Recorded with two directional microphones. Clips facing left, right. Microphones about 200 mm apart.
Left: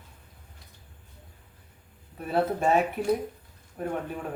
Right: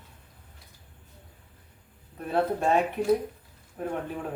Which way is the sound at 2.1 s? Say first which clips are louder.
Even; 5° left (ahead or behind).